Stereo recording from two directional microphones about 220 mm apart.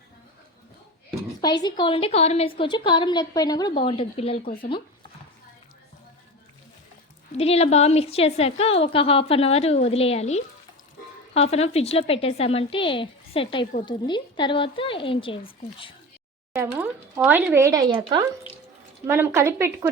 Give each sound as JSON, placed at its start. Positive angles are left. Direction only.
{"t": 1.4, "sound": "a woman's voice", "side_deg": 20}
{"t": 7.3, "sound": "a woman's voice", "side_deg": 25}
{"t": 16.6, "sound": "speech", "side_deg": -10}